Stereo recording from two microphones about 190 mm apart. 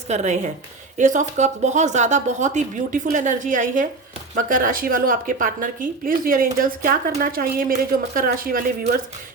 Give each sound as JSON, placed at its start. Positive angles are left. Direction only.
{"t": 0.1, "sound": "a woman's voice", "side_deg": -40}